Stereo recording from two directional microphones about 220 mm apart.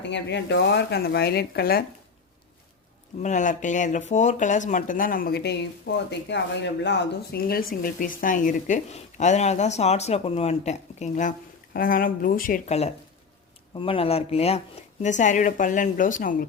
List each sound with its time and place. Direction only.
0.0 s speech: 50° left (ahead or behind)
3.2 s a woman's voice: 35° left (ahead or behind)